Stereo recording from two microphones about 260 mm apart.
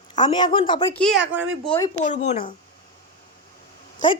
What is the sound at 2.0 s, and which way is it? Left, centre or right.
Speech, left.